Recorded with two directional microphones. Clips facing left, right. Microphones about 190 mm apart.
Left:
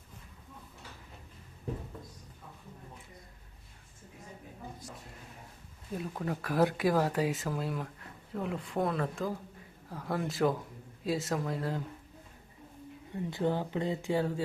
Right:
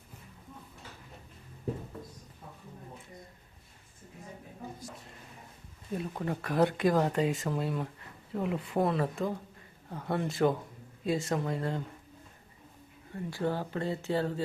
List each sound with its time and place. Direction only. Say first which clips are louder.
5.9 s speech: right 1 dB; centre (ahead or behind)
13.1 s speech: left 1 dB; 15° left (ahead or behind)